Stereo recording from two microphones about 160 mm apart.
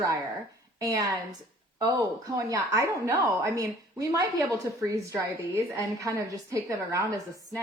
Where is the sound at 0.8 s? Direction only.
20° right (ahead or behind).